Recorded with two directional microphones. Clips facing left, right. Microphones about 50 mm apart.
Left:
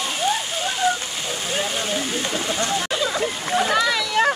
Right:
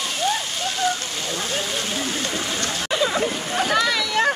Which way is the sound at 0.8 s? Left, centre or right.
Centre.